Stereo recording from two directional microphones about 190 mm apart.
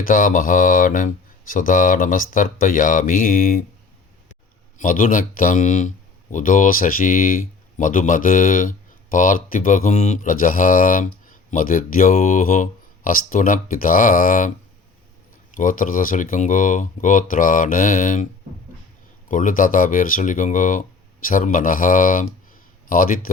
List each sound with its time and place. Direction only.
0.0 s speech: 45° left (ahead or behind)
4.8 s speech: 45° left (ahead or behind)
15.5 s speech: 45° left (ahead or behind)
19.3 s speech: 45° left (ahead or behind)